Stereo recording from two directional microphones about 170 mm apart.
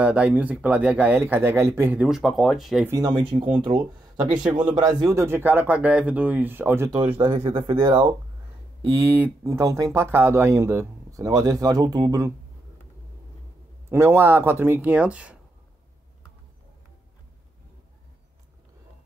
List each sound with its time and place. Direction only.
0.0 s speech: 10° right (ahead or behind)
2.9 s speech: 20° right (ahead or behind)
4.6 s speech: 5° right (ahead or behind)
7.2 s speech: 25° right (ahead or behind)
8.9 s speech: 10° right (ahead or behind)
13.8 s speech: 15° right (ahead or behind)